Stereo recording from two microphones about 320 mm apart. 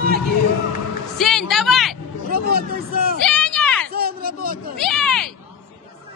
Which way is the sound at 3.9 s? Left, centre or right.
Right.